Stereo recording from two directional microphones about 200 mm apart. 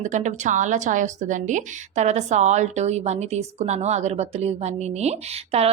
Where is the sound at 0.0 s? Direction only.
35° right (ahead or behind).